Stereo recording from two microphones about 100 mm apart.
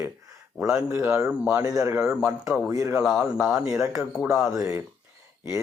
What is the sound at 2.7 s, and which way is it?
Speech, 30° right (ahead or behind).